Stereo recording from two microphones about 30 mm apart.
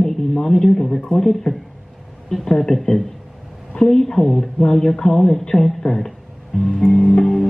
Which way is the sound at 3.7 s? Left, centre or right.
Centre.